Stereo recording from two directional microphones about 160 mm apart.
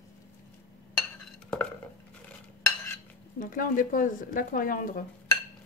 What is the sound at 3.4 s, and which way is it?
Speech, 60° left (ahead or behind).